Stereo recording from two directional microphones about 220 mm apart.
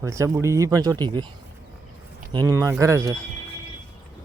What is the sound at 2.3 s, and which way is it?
Speech, 15° right (ahead or behind).